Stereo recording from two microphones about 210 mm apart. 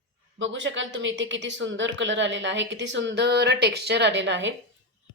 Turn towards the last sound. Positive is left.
turn(degrees=-60)  # may be behind; listen again after turning